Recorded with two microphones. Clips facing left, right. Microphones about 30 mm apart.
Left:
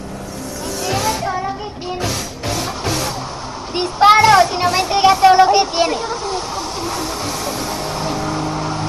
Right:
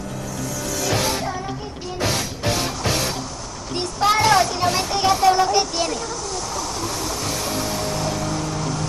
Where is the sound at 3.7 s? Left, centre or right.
Left.